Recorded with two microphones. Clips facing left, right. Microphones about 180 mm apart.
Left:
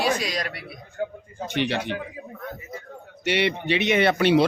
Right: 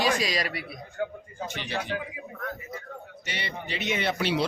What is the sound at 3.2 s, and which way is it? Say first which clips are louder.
Speech: left 14 dB; 70° left (ahead or behind).